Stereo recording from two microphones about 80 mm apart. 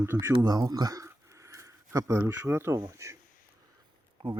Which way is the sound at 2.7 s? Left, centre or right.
Right.